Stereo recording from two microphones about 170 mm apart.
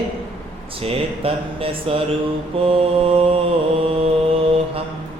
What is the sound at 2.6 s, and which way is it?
Mantra, 35° right (ahead or behind).